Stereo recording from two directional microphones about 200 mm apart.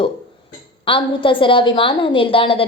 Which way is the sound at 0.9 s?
25° left (ahead or behind).